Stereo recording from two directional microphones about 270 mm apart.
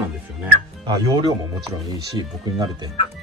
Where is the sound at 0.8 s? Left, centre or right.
Centre.